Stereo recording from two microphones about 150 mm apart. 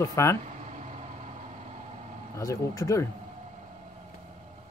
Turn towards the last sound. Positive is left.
turn(degrees=20)  # may be behind; listen again after turning